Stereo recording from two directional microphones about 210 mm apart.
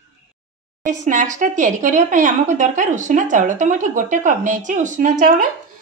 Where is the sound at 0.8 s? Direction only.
35° right (ahead or behind).